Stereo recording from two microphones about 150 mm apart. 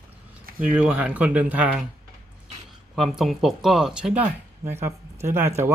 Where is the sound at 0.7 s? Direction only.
10° right (ahead or behind).